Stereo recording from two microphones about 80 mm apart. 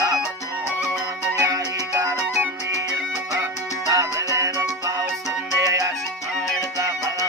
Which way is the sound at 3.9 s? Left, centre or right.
Right.